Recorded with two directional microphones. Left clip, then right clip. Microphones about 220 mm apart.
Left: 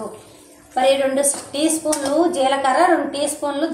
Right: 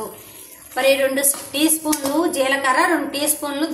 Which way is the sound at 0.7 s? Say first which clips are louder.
Left 1 dB; 30° right (ahead or behind).